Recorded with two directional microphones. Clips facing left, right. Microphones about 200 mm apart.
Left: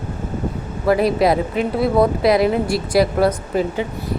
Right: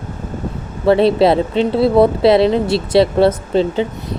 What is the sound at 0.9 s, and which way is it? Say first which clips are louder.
Speech: right 4 dB; 30° right (ahead or behind).